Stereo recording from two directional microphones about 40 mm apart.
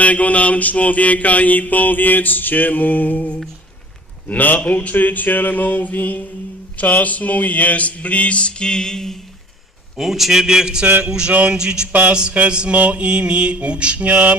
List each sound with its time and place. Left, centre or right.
0.0 s mantra: left
6.7 s a sound: left; by 9.1 s centre
10.0 s a man's voice: centre
11.0 s mantra: centre
11.3 s music: right
11.5 s mantra: centre
11.9 s music: right
12.5 s mantra: right
12.7 s mantra: right